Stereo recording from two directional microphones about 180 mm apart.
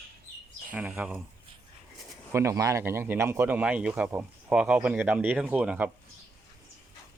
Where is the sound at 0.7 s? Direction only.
5° right (ahead or behind).